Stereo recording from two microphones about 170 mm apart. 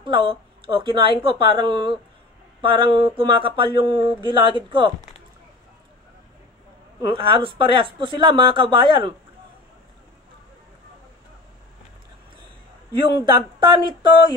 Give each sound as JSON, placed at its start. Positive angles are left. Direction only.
{"t": 0.0, "sound": "a woman's voice", "side_deg": -30}
{"t": 7.0, "sound": "speech", "side_deg": -30}
{"t": 13.2, "sound": "speech", "side_deg": -25}